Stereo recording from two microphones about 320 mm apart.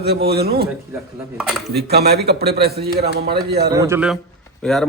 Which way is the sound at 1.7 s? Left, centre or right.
Right.